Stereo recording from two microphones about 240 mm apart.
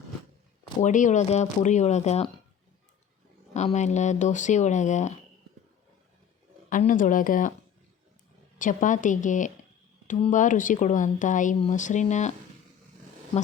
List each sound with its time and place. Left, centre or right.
0.8 s speech: left
3.5 s speech: left
6.7 s speech: left
8.5 s speech: left